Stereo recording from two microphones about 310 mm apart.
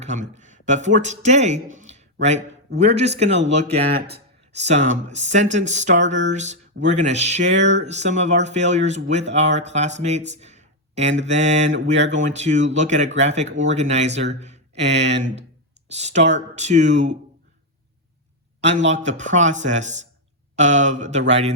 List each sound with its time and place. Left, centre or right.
0.0 s speech: right
18.9 s speech: right